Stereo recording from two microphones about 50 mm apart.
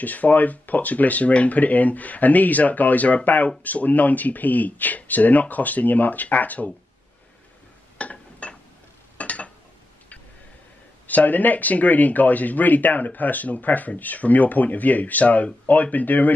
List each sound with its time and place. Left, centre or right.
0.0 s speech: left
8.0 s a sound: left
11.1 s speech: left